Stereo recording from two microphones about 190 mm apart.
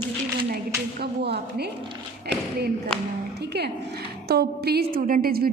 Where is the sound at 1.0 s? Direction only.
60° right (ahead or behind).